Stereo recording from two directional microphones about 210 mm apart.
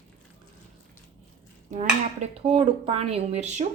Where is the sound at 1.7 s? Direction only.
35° right (ahead or behind).